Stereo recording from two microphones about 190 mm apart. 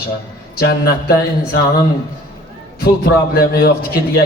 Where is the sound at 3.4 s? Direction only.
55° left (ahead or behind).